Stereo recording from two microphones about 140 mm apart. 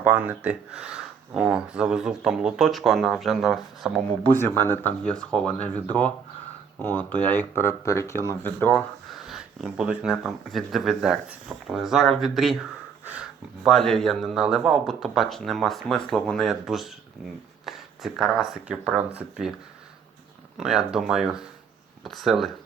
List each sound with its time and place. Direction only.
0.0 s speech: 10° right (ahead or behind)
4.4 s speech: 15° left (ahead or behind)
9.0 s speech: centre (ahead or behind)
13.7 s speech: 5° left (ahead or behind)
20.6 s speech: 5° right (ahead or behind)